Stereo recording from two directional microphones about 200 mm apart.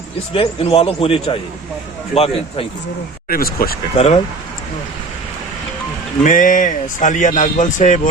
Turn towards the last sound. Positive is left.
turn(degrees=40)  # may be behind; listen again after turning